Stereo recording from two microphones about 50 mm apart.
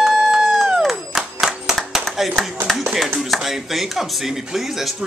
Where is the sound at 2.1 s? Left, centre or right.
Centre.